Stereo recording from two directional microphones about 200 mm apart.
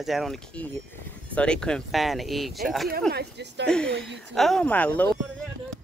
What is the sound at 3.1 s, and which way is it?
Speech, 55° right (ahead or behind).